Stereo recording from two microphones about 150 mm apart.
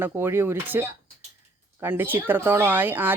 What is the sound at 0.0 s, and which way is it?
Speech, 15° right (ahead or behind).